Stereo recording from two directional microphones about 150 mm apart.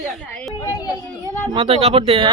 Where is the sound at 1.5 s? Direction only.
35° right (ahead or behind).